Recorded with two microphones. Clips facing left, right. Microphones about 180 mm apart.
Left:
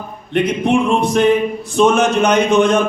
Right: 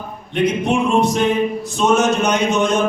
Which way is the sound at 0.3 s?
55° left (ahead or behind).